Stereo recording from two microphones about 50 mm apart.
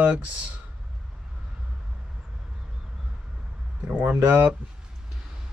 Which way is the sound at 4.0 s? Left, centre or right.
Right.